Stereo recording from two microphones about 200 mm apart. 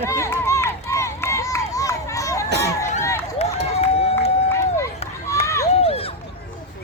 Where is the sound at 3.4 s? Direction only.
30° left (ahead or behind).